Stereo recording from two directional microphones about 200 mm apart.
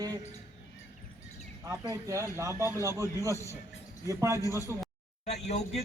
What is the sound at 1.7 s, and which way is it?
A man's voice, 15° right (ahead or behind).